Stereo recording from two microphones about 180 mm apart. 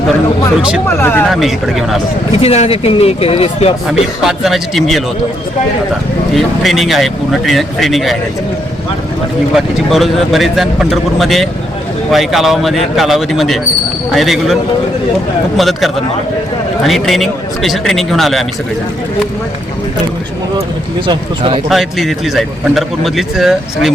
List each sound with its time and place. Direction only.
0.9 s speech: 10° left (ahead or behind)
1.3 s a man's voice: centre (ahead or behind)
2.4 s speech: 35° left (ahead or behind)
4.2 s a man's voice: centre (ahead or behind)
6.3 s a man's voice: centre (ahead or behind)
9.6 s a man's voice: centre (ahead or behind)
21.1 s speech: 30° right (ahead or behind)
21.7 s a man's voice: centre (ahead or behind)